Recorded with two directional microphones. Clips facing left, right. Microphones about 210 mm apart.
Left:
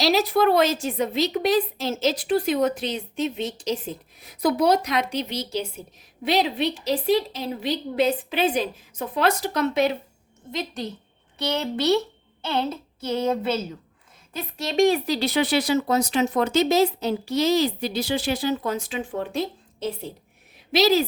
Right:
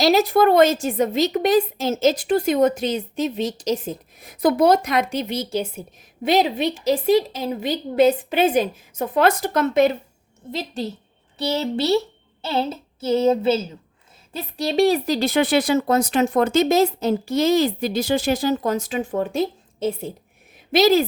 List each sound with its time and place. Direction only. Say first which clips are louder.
0.0 s a woman's voice: right 4 dB; 50° right (ahead or behind)
10.5 s speech: right 3 dB; 30° right (ahead or behind)
12.4 s a sound: right 3 dB; 5° right (ahead or behind)
13.2 s a woman's voice: right 5 dB; 25° right (ahead or behind); by 21.0 s 50° right (ahead or behind)